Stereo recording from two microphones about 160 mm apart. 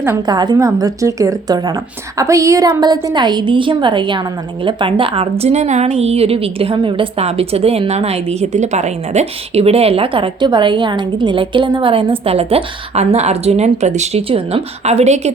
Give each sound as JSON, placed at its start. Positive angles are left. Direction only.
{"t": 0.0, "sound": "a woman's voice", "side_deg": -20}